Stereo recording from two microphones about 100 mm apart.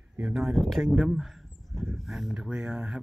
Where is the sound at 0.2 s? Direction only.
Centre (ahead or behind).